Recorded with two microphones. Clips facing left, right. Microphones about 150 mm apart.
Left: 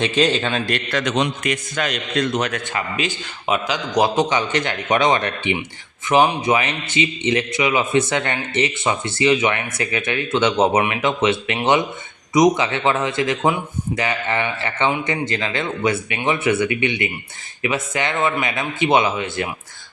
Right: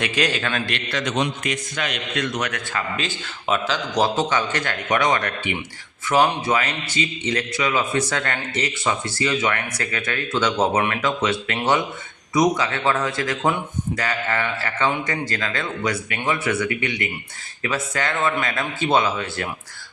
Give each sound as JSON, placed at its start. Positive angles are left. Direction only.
{"t": 0.0, "sound": "a man's voice", "side_deg": 25}
{"t": 0.7, "sound": "a man's voice", "side_deg": 50}
{"t": 1.0, "sound": "a man's voice", "side_deg": 75}
{"t": 1.7, "sound": "a man's voice", "side_deg": 40}
{"t": 2.7, "sound": "a man's voice", "side_deg": 15}